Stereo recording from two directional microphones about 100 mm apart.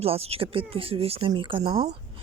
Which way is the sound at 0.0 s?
75° right (ahead or behind).